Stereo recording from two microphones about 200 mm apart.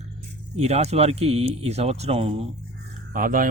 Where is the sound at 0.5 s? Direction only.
30° right (ahead or behind).